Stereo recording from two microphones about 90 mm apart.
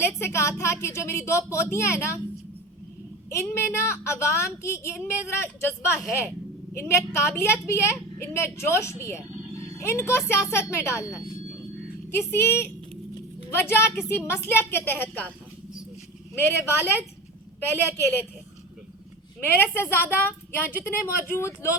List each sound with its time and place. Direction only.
0.0 s a woman's voice: 30° left (ahead or behind)
3.2 s a woman's voice: 30° left (ahead or behind)
16.3 s a woman's voice: 25° left (ahead or behind)
19.5 s a woman's voice: 25° left (ahead or behind)